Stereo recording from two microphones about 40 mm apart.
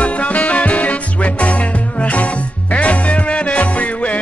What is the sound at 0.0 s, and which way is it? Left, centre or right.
Music, left.